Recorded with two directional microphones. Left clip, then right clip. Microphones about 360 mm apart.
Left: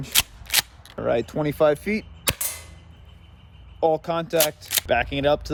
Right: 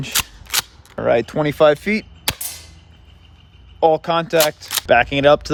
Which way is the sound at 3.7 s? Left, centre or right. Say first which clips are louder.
Right 6 dB; centre.